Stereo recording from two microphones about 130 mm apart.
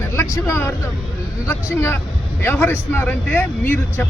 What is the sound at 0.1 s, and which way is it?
Speech, 20° left (ahead or behind).